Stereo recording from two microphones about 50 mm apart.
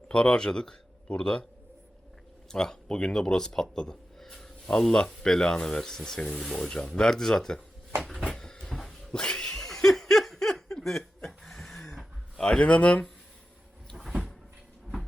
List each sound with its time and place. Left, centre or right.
0.1 s speech: centre
2.5 s speech: centre
5.2 s snake: centre
6.4 s speech: centre
6.7 s snake: centre
8.4 s cat: centre
9.2 s laughter: centre
11.8 s a sound: centre
13.9 s cupboard open or close: centre